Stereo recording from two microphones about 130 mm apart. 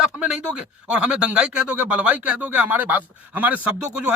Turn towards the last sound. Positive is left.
turn(degrees=-10)  # may be behind; listen again after turning